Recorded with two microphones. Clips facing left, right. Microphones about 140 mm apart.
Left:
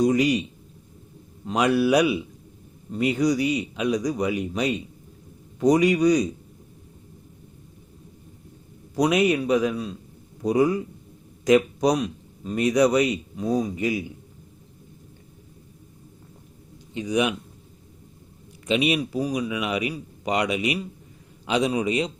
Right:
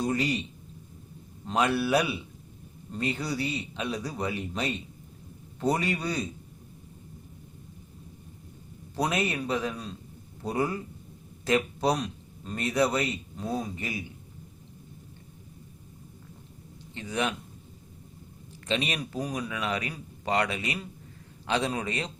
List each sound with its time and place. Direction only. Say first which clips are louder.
0.0 s speech: left 8 dB; 15° left (ahead or behind)
1.5 s speech: left 5 dB; 15° left (ahead or behind)
9.0 s speech: left 8 dB; 15° left (ahead or behind)
16.9 s speech: left 7 dB; 15° left (ahead or behind)
18.7 s speech: left 8 dB; 10° left (ahead or behind)